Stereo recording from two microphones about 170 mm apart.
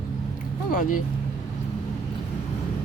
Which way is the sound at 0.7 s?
50° left (ahead or behind).